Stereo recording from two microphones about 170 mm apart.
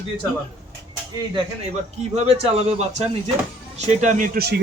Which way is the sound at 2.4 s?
40° right (ahead or behind).